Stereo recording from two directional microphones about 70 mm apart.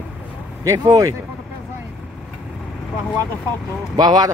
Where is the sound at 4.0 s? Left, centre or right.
Right.